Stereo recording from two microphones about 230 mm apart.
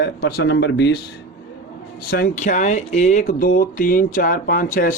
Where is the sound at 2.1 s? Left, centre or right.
Left.